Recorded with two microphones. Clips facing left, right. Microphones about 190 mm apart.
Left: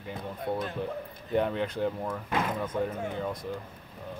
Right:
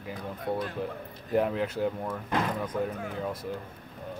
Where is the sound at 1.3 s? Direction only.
5° right (ahead or behind).